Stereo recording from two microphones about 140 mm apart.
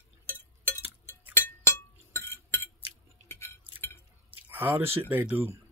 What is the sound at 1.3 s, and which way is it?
Chink, 15° left (ahead or behind).